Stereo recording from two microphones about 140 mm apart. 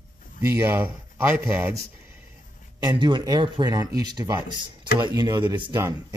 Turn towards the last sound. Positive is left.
turn(degrees=-35)  # may be behind; listen again after turning